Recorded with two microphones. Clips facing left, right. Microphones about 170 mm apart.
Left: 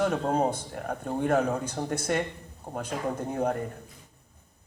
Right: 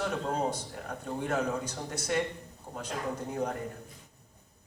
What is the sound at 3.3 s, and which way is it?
Speech, 50° left (ahead or behind).